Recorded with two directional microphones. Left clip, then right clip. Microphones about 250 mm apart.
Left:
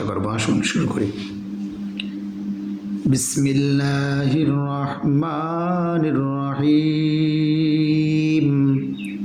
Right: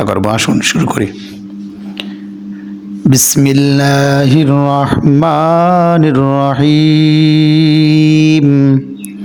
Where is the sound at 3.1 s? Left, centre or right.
Right.